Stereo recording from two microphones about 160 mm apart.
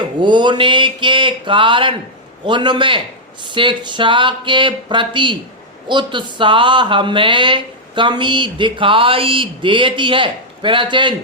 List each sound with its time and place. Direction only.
0.2 s speech: 30° right (ahead or behind)